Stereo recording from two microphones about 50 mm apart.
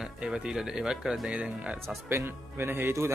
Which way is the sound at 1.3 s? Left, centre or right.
Right.